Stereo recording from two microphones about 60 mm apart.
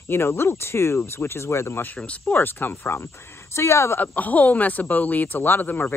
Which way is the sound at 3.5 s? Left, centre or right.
Left.